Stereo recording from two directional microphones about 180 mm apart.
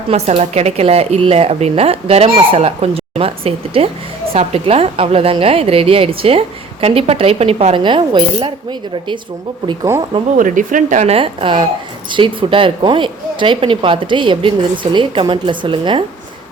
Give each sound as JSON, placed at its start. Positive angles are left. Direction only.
{"t": 0.1, "sound": "a woman's voice", "side_deg": -35}
{"t": 9.6, "sound": "speech", "side_deg": -15}
{"t": 10.3, "sound": "a woman's voice", "side_deg": -45}